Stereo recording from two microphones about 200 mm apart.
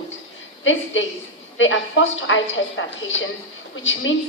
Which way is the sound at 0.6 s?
70° left (ahead or behind).